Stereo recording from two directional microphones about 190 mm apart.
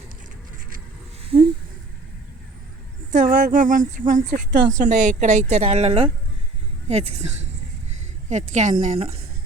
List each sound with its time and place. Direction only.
1.3 s speech: 30° right (ahead or behind)
3.1 s a woman's voice: 45° right (ahead or behind)